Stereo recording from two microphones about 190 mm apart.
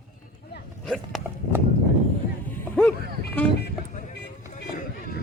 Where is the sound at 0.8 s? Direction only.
Centre (ahead or behind).